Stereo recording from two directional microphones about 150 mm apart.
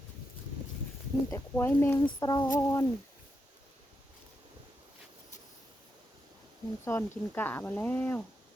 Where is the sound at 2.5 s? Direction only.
15° left (ahead or behind).